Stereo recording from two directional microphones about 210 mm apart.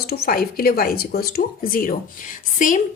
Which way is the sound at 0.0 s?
45° left (ahead or behind).